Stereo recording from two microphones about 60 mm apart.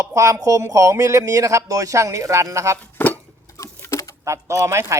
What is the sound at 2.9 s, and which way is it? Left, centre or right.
Dishes, left.